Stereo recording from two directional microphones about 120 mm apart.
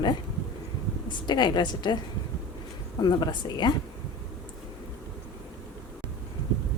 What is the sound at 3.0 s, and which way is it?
Speech, 35° left (ahead or behind).